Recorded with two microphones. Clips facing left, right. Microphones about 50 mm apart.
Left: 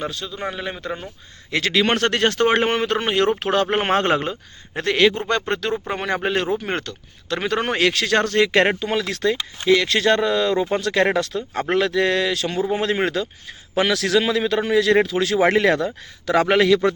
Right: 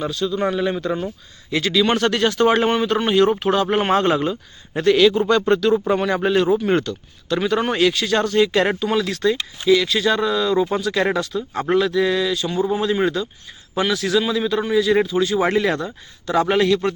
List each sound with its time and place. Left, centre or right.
0.0 s a man's voice: left
0.5 s speech: centre
1.5 s speech: left
3.7 s a man's voice: left
8.8 s speech: left
9.3 s speech: left
12.7 s speech: left
13.7 s a man's voice: left